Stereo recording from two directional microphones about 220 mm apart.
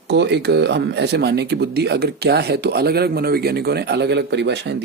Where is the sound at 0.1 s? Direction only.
50° right (ahead or behind).